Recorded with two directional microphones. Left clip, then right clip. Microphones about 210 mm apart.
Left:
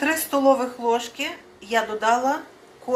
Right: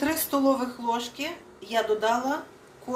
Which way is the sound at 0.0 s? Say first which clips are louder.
Left 5 dB; centre (ahead or behind).